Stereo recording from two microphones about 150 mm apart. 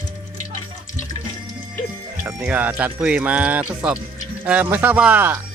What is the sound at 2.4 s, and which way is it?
Speech, 10° right (ahead or behind).